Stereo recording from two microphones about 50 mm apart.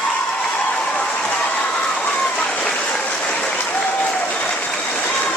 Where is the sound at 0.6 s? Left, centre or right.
Left.